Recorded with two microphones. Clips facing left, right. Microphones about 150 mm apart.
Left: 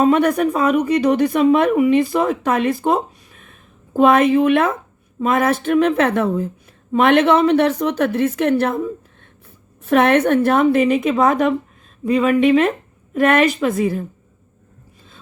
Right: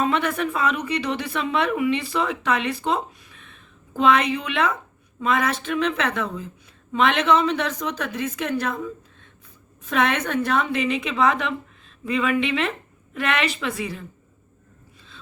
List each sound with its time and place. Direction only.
0.0 s a woman's voice: 45° left (ahead or behind)
9.8 s speech: 55° left (ahead or behind)